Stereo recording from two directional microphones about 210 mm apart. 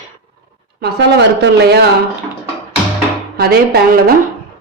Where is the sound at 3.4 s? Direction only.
50° right (ahead or behind).